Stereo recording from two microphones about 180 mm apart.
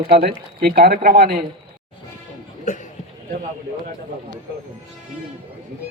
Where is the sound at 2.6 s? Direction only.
45° left (ahead or behind).